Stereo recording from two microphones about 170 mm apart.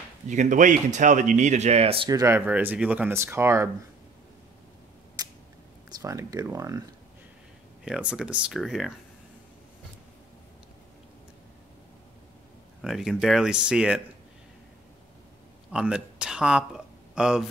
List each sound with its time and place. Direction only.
0.3 s speech: 45° right (ahead or behind)
2.0 s speech: 20° right (ahead or behind)
5.2 s camera: 20° right (ahead or behind)
5.9 s speech: 20° right (ahead or behind)
7.8 s speech: 5° right (ahead or behind)
12.8 s speech: centre (ahead or behind)
15.7 s speech: 5° right (ahead or behind)